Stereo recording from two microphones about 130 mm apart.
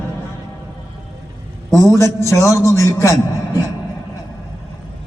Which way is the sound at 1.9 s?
20° left (ahead or behind).